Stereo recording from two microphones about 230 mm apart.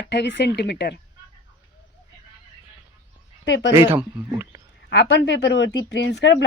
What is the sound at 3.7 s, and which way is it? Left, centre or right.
Speech, centre.